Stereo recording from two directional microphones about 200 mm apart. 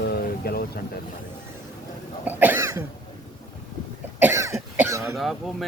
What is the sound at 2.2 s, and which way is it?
Cough, 10° right (ahead or behind).